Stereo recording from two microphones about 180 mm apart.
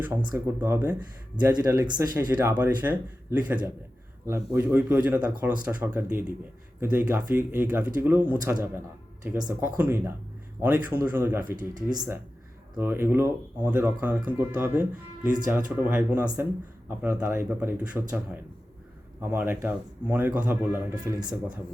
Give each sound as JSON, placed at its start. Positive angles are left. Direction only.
{"t": 0.3, "sound": "speech", "side_deg": -10}
{"t": 11.5, "sound": "speech", "side_deg": -20}
{"t": 21.2, "sound": "speech", "side_deg": -25}